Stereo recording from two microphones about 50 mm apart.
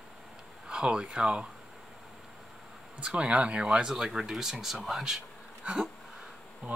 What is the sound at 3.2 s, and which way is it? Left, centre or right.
Speech, right.